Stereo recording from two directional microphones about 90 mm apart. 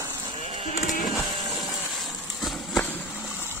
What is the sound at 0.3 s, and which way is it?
Sheep, 90° right.